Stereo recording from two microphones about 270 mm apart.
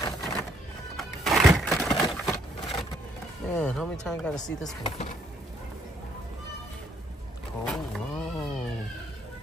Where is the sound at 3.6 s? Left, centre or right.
Centre.